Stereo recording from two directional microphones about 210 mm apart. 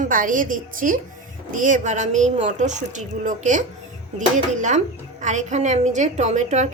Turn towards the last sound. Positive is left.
turn(degrees=-35)  # may be behind; listen again after turning